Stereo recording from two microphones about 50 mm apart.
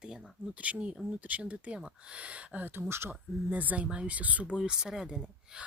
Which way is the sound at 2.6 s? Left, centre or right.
Right.